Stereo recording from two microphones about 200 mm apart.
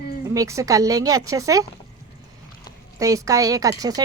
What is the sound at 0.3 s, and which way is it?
A woman's voice, 15° right (ahead or behind).